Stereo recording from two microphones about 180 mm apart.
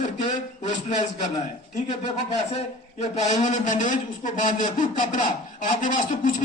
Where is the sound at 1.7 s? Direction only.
35° left (ahead or behind).